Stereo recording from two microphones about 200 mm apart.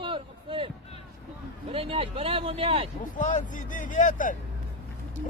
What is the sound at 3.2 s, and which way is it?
Speech, 40° left (ahead or behind).